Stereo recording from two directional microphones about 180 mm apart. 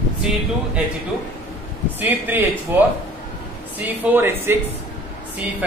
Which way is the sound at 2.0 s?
10° right (ahead or behind).